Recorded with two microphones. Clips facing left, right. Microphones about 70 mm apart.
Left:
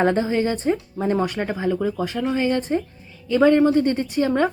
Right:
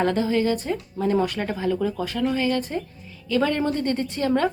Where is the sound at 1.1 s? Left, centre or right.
Centre.